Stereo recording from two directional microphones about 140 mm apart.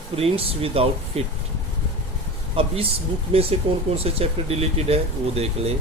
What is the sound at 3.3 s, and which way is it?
Speech, 45° right (ahead or behind).